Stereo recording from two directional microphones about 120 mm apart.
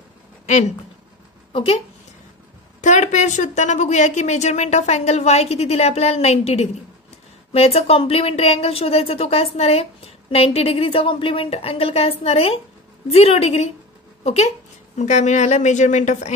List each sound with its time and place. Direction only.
1.5 s speech: 50° left (ahead or behind)
2.8 s a woman's voice: 80° left; by 14.5 s 60° left (ahead or behind)
15.0 s a woman's voice: 80° left